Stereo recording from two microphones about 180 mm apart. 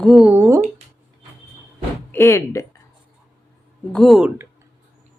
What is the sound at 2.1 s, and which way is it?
Speech, 15° left (ahead or behind).